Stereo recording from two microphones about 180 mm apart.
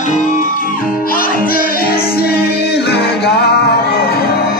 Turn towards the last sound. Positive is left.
turn(degrees=65)  # may be behind; listen again after turning